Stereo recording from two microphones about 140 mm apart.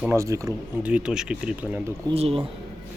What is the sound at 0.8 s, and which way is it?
Speech, 10° right (ahead or behind).